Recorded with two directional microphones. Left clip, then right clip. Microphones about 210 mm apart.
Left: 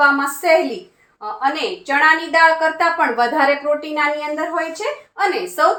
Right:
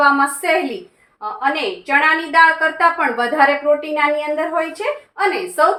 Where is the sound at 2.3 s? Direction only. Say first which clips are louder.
Right 1 dB; 15° left (ahead or behind).